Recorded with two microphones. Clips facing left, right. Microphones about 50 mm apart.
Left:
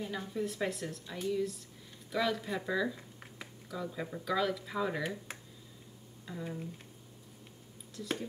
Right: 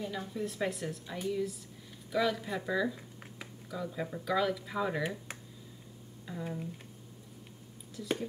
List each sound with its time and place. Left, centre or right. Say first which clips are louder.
0.2 s a woman's voice: even; centre
7.9 s speech: right 3 dB; centre